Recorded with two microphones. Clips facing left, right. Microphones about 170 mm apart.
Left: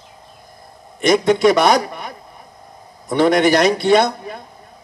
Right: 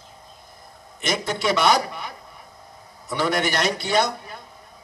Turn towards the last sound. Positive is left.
turn(degrees=55)  # may be behind; listen again after turning